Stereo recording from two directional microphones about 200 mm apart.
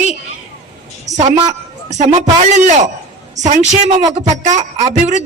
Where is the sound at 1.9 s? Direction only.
35° right (ahead or behind).